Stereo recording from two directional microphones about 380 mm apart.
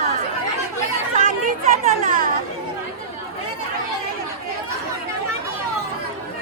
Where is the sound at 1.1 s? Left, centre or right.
Right.